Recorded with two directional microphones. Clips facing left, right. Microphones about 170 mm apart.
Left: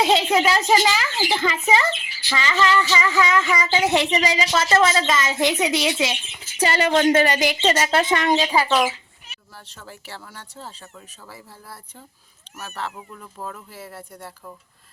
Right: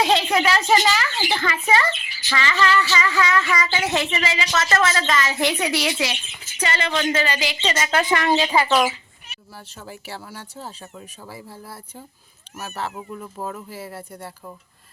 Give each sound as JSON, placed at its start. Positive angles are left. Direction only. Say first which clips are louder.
{"t": 0.3, "sound": "a woman's voice", "louder": "left 1 dB", "side_deg": 20}
{"t": 2.3, "sound": "a woman's voice", "louder": "even", "side_deg": 20}
{"t": 4.9, "sound": "speech", "louder": "left 1 dB", "side_deg": 20}
{"t": 6.6, "sound": "speech", "louder": "left 5 dB", "side_deg": 40}
{"t": 7.9, "sound": "speech", "louder": "even", "side_deg": 20}
{"t": 8.6, "sound": "speech", "louder": "right 1 dB", "side_deg": -5}
{"t": 12.5, "sound": "speech", "louder": "right 2 dB", "side_deg": -10}